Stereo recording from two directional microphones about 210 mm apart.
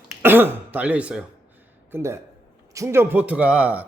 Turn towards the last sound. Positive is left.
turn(degrees=-5)  # may be behind; listen again after turning